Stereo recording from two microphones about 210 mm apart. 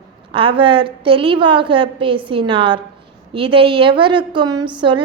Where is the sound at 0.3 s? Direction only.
25° right (ahead or behind).